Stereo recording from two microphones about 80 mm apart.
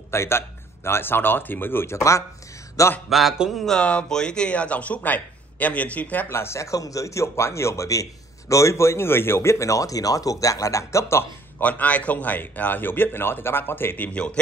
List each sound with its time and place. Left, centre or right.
0.1 s speech: left
3.1 s a man's voice: centre
3.6 s speech: centre
6.3 s speech: left
11.6 s a man's voice: centre